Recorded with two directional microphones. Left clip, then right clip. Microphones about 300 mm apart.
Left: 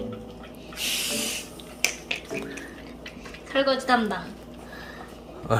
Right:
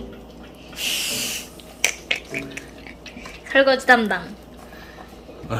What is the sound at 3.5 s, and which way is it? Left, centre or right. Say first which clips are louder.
Speech: right 7 dB; centre.